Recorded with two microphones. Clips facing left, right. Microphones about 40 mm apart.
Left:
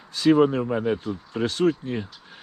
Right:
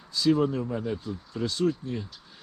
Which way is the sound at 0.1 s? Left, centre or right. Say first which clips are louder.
Left 6 dB; left.